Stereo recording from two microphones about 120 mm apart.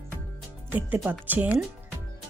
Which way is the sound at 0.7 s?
15° right (ahead or behind).